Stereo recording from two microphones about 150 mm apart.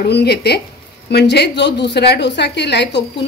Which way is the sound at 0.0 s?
90° left.